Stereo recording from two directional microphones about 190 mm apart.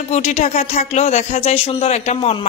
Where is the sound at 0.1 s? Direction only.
35° left (ahead or behind).